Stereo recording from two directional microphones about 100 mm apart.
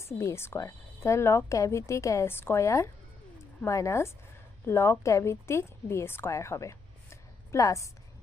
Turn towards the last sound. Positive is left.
turn(degrees=30)  # may be behind; listen again after turning